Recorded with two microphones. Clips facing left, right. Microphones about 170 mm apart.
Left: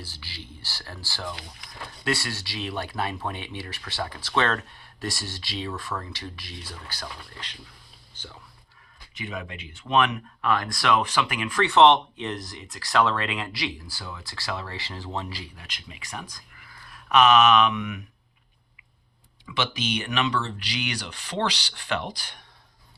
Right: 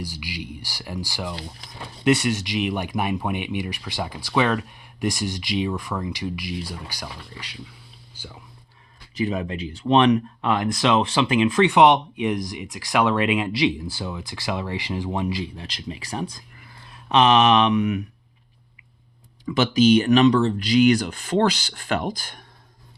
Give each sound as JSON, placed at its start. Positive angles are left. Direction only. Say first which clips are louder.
{"t": 0.0, "sound": "speech", "louder": "right 10 dB", "side_deg": -15}
{"t": 1.3, "sound": "speech", "louder": "right 4 dB", "side_deg": -30}
{"t": 1.8, "sound": "speech", "louder": "right 9 dB", "side_deg": -20}
{"t": 9.1, "sound": "speech", "louder": "right 10 dB", "side_deg": -35}
{"t": 10.4, "sound": "speech", "louder": "even", "side_deg": -20}
{"t": 15.6, "sound": "speech", "louder": "right 11 dB", "side_deg": -35}
{"t": 19.5, "sound": "speech", "louder": "right 12 dB", "side_deg": -40}